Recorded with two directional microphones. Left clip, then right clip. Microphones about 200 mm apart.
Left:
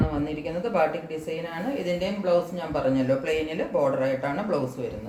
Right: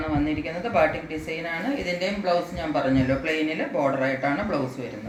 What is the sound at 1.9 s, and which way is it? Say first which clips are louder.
Speech: left 1 dB; 25° left (ahead or behind).